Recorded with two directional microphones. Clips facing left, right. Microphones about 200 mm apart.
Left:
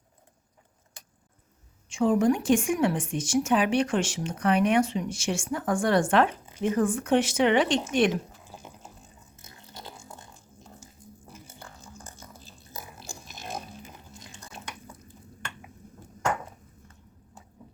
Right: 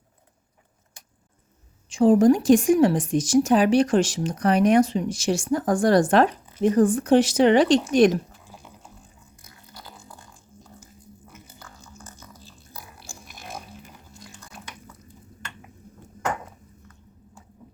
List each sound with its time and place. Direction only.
1.9 s speech: 35° right (ahead or behind)
8.6 s water: 25° left (ahead or behind)
9.3 s a sound: 25° left (ahead or behind)